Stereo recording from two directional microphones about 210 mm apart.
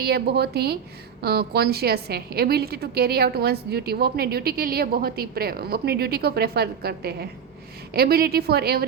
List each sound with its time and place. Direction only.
0.0 s a woman's voice: 50° right (ahead or behind)